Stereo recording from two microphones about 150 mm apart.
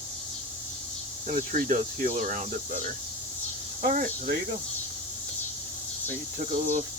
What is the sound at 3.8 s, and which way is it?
Speech, 65° right (ahead or behind).